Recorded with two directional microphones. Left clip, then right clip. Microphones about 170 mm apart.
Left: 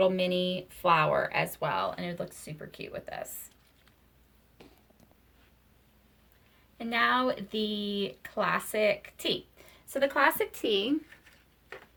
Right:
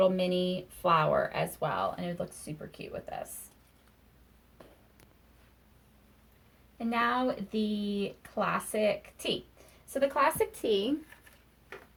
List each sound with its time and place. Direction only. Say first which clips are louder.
0.0 s speech: left 1 dB; 20° left (ahead or behind)
6.7 s speech: left 3 dB; 20° left (ahead or behind)